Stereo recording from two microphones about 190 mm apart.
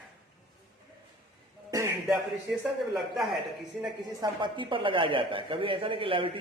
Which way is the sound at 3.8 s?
25° right (ahead or behind).